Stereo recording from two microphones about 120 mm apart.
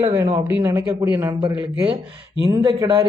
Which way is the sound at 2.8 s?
45° right (ahead or behind).